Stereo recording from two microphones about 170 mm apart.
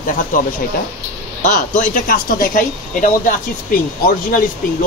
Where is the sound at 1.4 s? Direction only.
50° left (ahead or behind).